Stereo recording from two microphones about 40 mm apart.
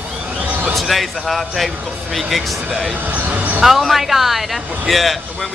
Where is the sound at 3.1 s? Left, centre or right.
Right.